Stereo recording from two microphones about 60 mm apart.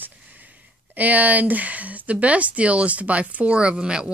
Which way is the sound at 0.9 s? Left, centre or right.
Right.